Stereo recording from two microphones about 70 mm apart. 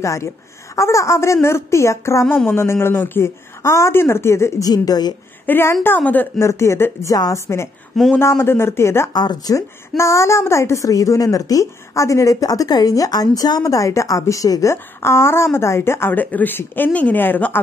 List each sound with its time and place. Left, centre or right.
0.0 s a woman's voice: left
2.2 s speech: left
3.6 s speech: left
4.6 s speech: left
5.5 s a woman's voice: left
6.4 s a woman's voice: left
9.1 s speech: left
9.6 s a woman's voice: left